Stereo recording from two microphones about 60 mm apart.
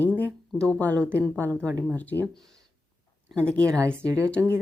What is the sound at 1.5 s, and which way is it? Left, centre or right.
Speech, right.